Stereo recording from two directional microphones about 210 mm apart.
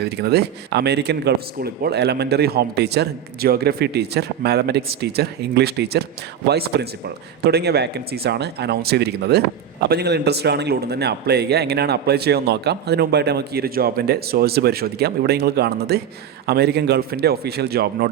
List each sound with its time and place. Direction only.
0.0 s a man's voice: 50° right (ahead or behind)